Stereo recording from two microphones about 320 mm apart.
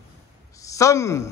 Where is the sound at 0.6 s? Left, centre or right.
Centre.